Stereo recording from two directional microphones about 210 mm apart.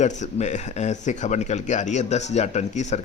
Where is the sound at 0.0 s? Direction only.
35° left (ahead or behind).